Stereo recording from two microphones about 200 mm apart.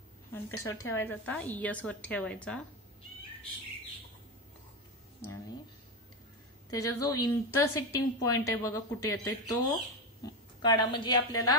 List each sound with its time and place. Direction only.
0.3 s a woman's voice: 10° left (ahead or behind)
6.7 s a woman's voice: 15° left (ahead or behind)